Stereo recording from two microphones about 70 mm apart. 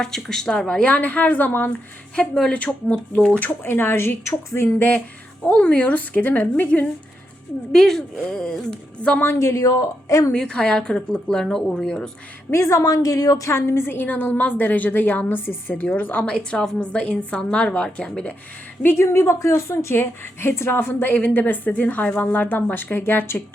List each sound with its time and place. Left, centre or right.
0.0 s a woman's voice: centre; by 1.7 s left
2.1 s a woman's voice: centre
3.4 s speech: left
4.8 s a woman's voice: centre
7.7 s a woman's voice: centre
9.2 s a woman's voice: left
10.3 s a woman's voice: centre
12.5 s a woman's voice: left
13.5 s a woman's voice: left; by 18.3 s centre
18.8 s a woman's voice: left